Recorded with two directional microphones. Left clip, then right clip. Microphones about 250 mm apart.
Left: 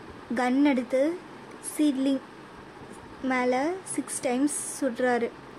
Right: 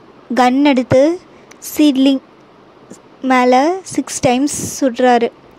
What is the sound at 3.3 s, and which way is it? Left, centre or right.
A woman's voice, right.